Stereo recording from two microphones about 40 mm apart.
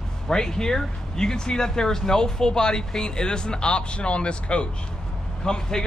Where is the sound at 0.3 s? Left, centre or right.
Centre.